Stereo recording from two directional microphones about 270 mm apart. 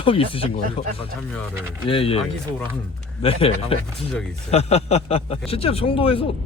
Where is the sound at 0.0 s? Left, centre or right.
Centre.